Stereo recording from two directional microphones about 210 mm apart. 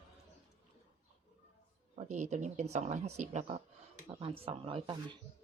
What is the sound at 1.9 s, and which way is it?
A woman's voice, 35° right (ahead or behind).